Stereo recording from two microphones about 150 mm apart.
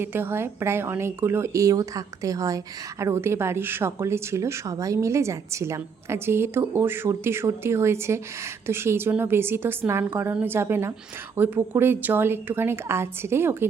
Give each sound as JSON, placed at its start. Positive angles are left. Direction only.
{"t": 0.0, "sound": "speech", "side_deg": -15}